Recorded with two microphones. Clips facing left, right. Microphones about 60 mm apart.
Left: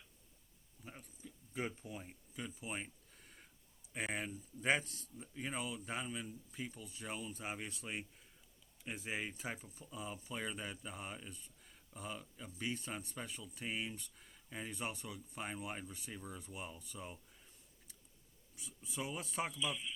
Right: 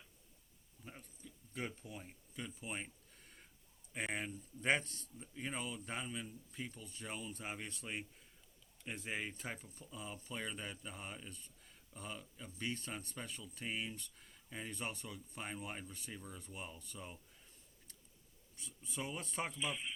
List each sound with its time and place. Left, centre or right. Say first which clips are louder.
0.9 s speech: left 1 dB; centre
19.5 s speech: left 1 dB; right